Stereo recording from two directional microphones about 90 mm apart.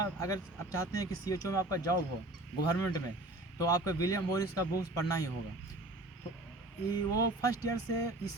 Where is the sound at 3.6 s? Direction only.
40° left (ahead or behind).